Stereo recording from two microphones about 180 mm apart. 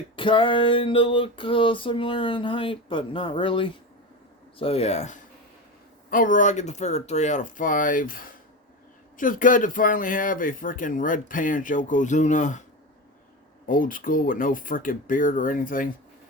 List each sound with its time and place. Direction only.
0.2 s a sound: 30° left (ahead or behind)
4.5 s speech: 35° left (ahead or behind)
13.7 s speech: 50° left (ahead or behind)